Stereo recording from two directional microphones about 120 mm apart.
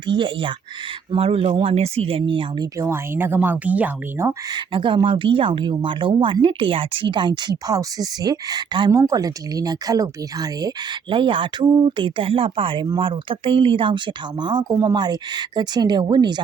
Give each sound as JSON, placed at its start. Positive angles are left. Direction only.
{"t": 0.1, "sound": "speech", "side_deg": -45}
{"t": 2.7, "sound": "speech", "side_deg": -20}
{"t": 4.5, "sound": "speech", "side_deg": -45}
{"t": 11.1, "sound": "speech", "side_deg": -45}
{"t": 11.9, "sound": "speech", "side_deg": -45}